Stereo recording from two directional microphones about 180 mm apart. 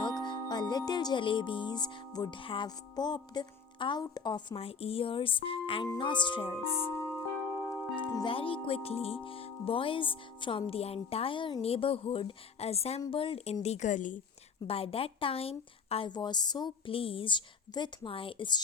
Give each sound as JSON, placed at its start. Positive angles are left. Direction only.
{"t": 0.3, "sound": "speech", "side_deg": 25}
{"t": 8.0, "sound": "speech", "side_deg": 25}
{"t": 14.7, "sound": "speech", "side_deg": 30}